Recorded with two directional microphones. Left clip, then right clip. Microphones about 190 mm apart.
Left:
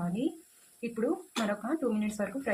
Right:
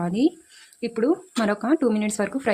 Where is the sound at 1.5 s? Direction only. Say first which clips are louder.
Right 11 dB; 65° right (ahead or behind).